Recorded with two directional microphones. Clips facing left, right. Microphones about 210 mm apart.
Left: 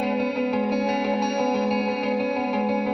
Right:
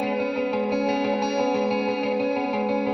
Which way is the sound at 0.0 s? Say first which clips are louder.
Left 1 dB; centre (ahead or behind).